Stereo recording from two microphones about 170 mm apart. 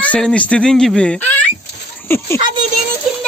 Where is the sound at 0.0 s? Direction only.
5° left (ahead or behind).